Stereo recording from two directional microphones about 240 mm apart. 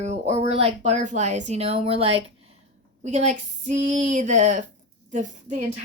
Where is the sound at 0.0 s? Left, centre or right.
Right.